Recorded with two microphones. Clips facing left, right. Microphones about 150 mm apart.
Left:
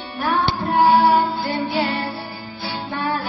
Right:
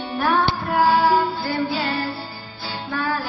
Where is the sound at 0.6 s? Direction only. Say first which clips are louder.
Left 4 dB; 20° left (ahead or behind).